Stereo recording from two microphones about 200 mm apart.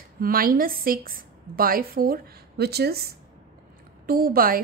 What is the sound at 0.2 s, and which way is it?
A woman's voice, 45° right (ahead or behind).